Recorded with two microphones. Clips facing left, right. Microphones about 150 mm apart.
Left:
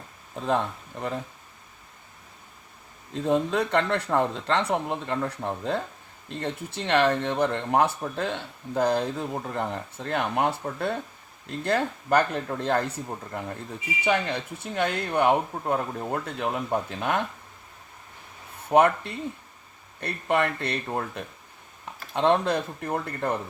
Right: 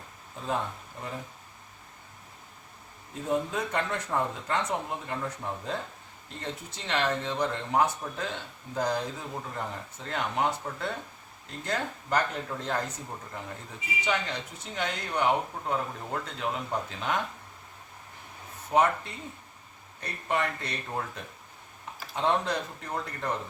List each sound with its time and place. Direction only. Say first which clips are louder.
0.3 s speech: left 6 dB; 70° left (ahead or behind)
3.1 s speech: left 6 dB; 75° left (ahead or behind); by 12.8 s 60° left (ahead or behind)
14.0 s speech: left 6 dB; 60° left (ahead or behind)
18.7 s speech: left 5 dB; 60° left (ahead or behind)